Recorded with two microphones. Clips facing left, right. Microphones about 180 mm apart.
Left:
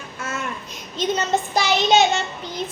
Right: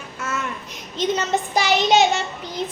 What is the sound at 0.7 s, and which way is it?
A child's voice, 20° right (ahead or behind).